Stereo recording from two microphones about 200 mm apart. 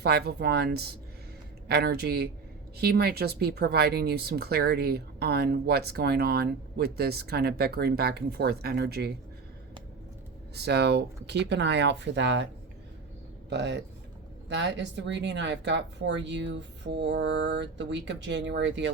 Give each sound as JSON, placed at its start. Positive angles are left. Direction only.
{"t": 0.0, "sound": "speech", "side_deg": -55}
{"t": 10.5, "sound": "speech", "side_deg": -55}
{"t": 13.5, "sound": "speech", "side_deg": -60}